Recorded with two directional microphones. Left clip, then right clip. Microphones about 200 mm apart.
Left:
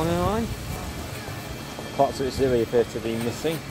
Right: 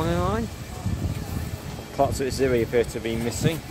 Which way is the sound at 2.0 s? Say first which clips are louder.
Left 1 dB; 20° right (ahead or behind).